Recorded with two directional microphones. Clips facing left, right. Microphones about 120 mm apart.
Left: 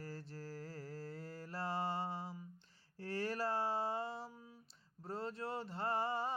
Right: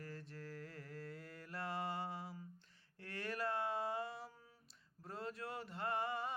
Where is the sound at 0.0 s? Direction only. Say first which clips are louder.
Left 2 dB; 35° left (ahead or behind).